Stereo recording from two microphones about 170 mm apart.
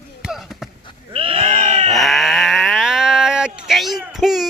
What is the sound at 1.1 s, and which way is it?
Sheep, 30° right (ahead or behind).